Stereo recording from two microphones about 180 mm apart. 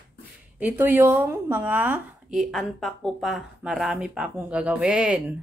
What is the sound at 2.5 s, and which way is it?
Speech, centre (ahead or behind).